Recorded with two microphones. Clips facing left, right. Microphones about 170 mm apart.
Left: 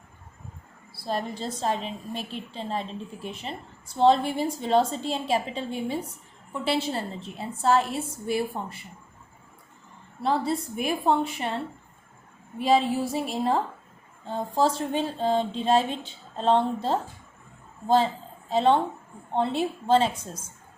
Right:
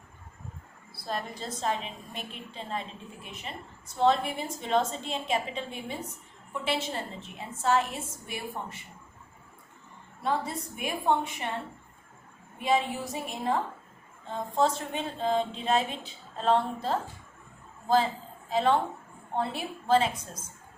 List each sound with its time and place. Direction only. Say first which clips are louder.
0.9 s a woman's voice: left 5 dB; 30° left (ahead or behind)
10.2 s a woman's voice: left 5 dB; 30° left (ahead or behind)
12.6 s a woman's voice: left 5 dB; 35° left (ahead or behind)